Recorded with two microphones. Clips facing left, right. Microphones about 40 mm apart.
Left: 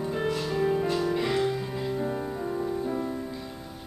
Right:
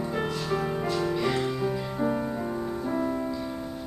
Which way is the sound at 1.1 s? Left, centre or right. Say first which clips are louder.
Left 1 dB; centre.